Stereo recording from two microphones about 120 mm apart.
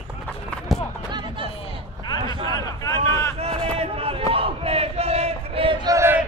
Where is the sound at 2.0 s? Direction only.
35° left (ahead or behind).